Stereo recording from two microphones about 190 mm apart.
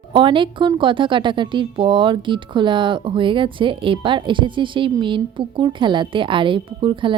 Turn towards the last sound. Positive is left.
turn(degrees=-25)  # may be behind; listen again after turning